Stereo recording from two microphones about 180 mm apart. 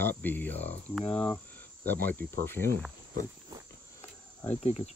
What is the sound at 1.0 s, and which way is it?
Cricket, 35° left (ahead or behind).